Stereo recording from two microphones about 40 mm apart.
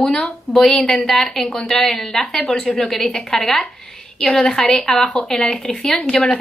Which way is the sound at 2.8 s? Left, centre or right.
Centre.